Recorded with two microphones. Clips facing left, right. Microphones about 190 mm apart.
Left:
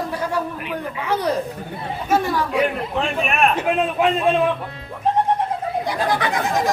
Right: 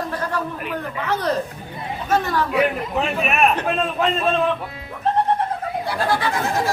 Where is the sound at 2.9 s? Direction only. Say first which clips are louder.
Even; 5° right (ahead or behind).